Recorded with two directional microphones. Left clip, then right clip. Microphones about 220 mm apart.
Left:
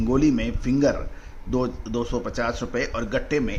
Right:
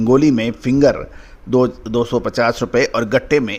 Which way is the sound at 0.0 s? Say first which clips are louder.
Right 8 dB; 40° right (ahead or behind).